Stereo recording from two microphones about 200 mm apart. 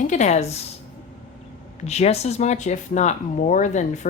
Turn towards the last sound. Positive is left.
turn(degrees=35)  # may be behind; listen again after turning